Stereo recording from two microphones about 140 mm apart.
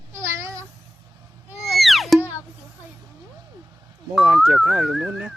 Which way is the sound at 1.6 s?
Centre (ahead or behind).